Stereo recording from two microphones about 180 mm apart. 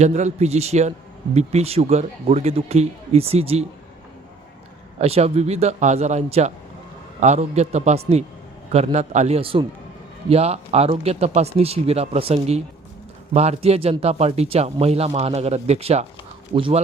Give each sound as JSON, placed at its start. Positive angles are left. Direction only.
{"t": 0.0, "sound": "a man's voice", "side_deg": -40}
{"t": 4.9, "sound": "a man's voice", "side_deg": -35}